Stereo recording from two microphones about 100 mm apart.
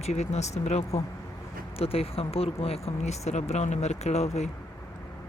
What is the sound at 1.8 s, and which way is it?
Speech, 75° left (ahead or behind).